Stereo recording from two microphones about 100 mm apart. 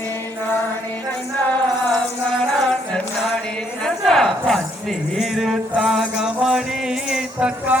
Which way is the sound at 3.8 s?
Centre (ahead or behind).